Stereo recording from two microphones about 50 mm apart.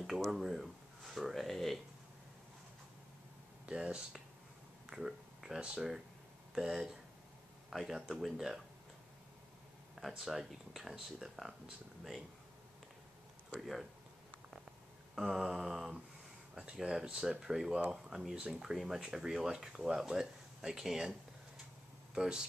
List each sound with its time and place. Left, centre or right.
0.0 s speech: centre
3.6 s speech: centre
9.9 s speech: centre
13.6 s speech: centre
15.2 s speech: centre
22.1 s speech: centre